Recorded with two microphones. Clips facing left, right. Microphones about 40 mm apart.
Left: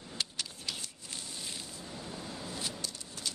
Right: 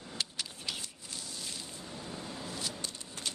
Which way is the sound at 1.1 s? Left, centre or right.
Left.